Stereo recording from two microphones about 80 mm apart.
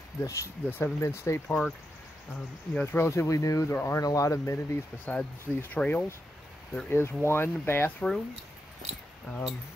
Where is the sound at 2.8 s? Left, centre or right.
Left.